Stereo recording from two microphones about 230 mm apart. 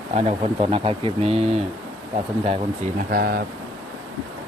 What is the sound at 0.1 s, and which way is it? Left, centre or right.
Speech, right.